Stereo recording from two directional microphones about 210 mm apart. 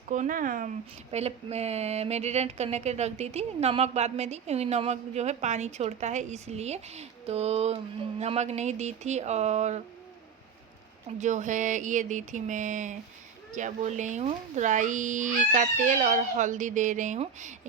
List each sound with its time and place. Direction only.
0.1 s speech: 40° right (ahead or behind)
1.1 s speech: 30° right (ahead or behind)
11.2 s speech: 35° right (ahead or behind)